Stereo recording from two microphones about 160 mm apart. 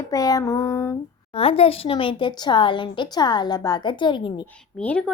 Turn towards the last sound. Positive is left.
turn(degrees=5)  # may be behind; listen again after turning